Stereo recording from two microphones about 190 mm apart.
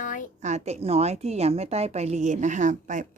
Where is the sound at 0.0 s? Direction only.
45° left (ahead or behind).